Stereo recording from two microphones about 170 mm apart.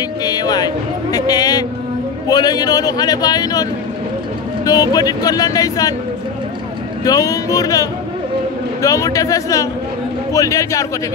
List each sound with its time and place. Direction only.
0.2 s music: 25° left (ahead or behind)
2.2 s a man's voice: 25° left (ahead or behind)
4.6 s a man's voice: 20° left (ahead or behind)
7.1 s a man's voice: 20° left (ahead or behind)